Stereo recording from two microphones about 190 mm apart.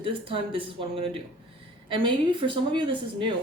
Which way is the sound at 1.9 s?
25° right (ahead or behind).